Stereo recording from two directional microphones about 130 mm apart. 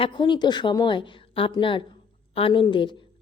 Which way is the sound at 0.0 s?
35° left (ahead or behind).